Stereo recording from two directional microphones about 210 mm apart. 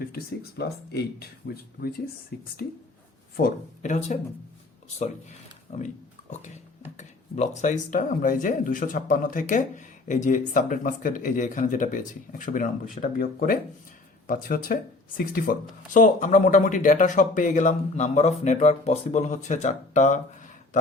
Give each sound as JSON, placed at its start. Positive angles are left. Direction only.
{"t": 0.0, "sound": "speech", "side_deg": 50}
{"t": 15.9, "sound": "speech", "side_deg": 35}